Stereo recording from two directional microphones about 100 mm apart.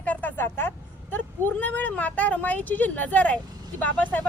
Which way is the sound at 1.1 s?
20° left (ahead or behind).